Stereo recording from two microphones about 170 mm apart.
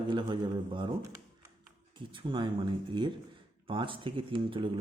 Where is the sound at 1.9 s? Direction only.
30° right (ahead or behind).